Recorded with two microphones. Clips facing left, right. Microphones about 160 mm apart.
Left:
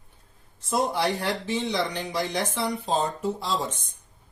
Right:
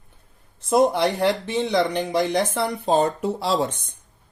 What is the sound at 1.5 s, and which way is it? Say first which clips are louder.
Speech: right 6 dB; 60° right (ahead or behind).